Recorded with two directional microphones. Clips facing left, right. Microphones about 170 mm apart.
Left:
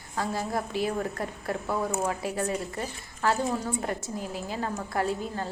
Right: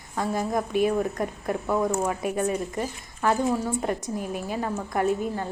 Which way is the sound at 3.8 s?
20° right (ahead or behind).